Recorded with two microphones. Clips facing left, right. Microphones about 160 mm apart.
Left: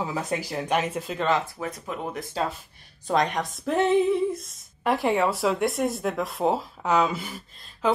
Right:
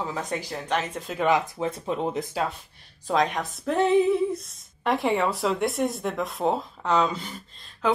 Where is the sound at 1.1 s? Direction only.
15° right (ahead or behind).